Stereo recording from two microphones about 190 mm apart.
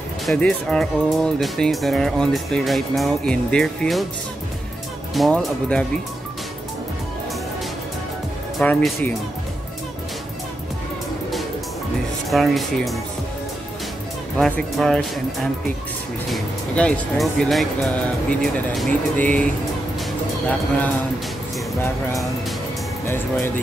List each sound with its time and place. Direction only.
0.3 s speech: 5° left (ahead or behind)
5.1 s speech: centre (ahead or behind)
8.5 s speech: 5° left (ahead or behind)
12.3 s speech: centre (ahead or behind)
14.4 s speech: centre (ahead or behind)
16.3 s speech: 5° left (ahead or behind)
23.0 s speech: 10° left (ahead or behind)